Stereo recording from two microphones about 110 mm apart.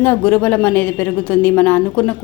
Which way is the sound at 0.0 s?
15° left (ahead or behind).